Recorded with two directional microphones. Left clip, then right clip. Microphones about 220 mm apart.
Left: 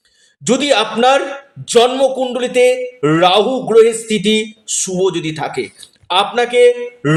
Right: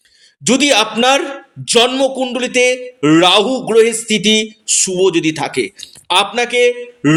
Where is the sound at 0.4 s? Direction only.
30° right (ahead or behind).